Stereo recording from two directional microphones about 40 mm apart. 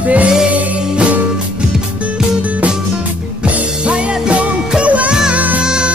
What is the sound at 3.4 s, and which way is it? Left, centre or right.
Music, right.